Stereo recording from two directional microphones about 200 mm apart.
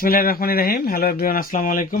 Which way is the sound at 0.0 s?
45° left (ahead or behind).